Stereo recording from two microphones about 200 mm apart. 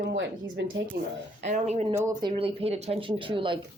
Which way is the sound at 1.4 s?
35° right (ahead or behind).